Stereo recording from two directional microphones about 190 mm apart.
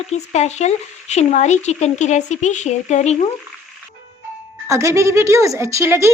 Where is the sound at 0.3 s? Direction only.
35° left (ahead or behind).